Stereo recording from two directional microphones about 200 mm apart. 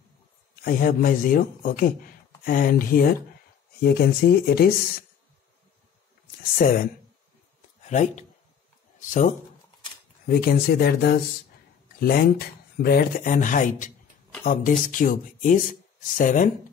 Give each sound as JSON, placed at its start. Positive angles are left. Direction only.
{"t": 0.7, "sound": "speech", "side_deg": 45}
{"t": 6.6, "sound": "speech", "side_deg": 45}
{"t": 10.2, "sound": "speech", "side_deg": 50}